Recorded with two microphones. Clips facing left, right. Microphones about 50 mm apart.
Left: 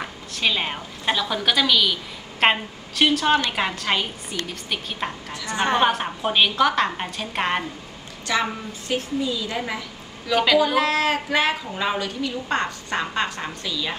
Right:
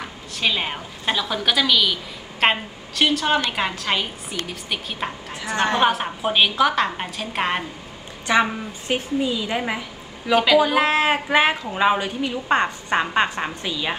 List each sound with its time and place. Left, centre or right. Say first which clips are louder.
0.3 s a woman's voice: right 1 dB; centre
8.3 s a woman's voice: right 5 dB; right
10.3 s a woman's voice: right 2 dB; centre
10.9 s a woman's voice: right 3 dB; right